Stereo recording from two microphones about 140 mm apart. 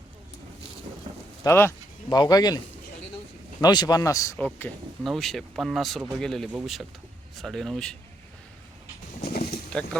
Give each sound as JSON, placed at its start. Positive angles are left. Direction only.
{"t": 1.5, "sound": "speech", "side_deg": 15}
{"t": 2.0, "sound": "speech", "side_deg": 30}
{"t": 3.6, "sound": "speech", "side_deg": 30}
{"t": 4.4, "sound": "speech", "side_deg": 10}
{"t": 5.0, "sound": "speech", "side_deg": 0}
{"t": 9.2, "sound": "a sound", "side_deg": 90}